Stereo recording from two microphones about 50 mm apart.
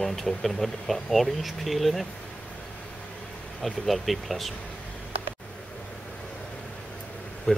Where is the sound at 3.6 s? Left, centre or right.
Centre.